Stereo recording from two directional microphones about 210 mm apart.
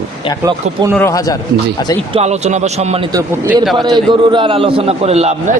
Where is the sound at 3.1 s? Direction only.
15° right (ahead or behind).